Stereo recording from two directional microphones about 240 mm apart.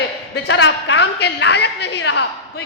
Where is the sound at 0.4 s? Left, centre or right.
Left.